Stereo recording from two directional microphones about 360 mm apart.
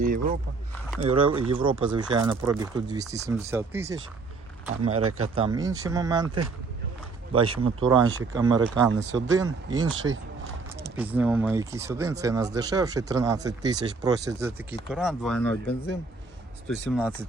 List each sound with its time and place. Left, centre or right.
0.0 s a sound: right
1.0 s speech: centre
4.9 s speech: right
5.3 s speech: centre
7.6 s speech: centre
9.9 s speech: right
10.9 s speech: centre